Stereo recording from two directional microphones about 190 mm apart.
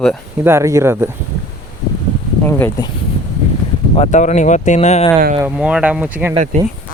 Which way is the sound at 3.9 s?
35° left (ahead or behind).